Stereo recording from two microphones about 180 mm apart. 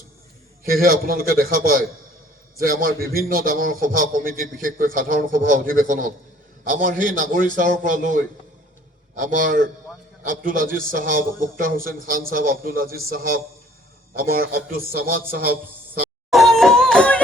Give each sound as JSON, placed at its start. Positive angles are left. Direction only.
{"t": 0.7, "sound": "a man's voice", "side_deg": -55}
{"t": 16.3, "sound": "music", "side_deg": 0}